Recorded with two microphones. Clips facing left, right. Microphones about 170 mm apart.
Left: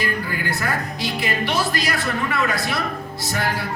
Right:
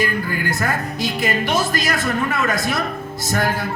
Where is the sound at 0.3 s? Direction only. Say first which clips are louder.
Right 3 dB; 45° right (ahead or behind).